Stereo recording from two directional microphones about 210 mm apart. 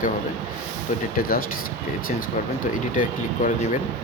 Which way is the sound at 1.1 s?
45° left (ahead or behind).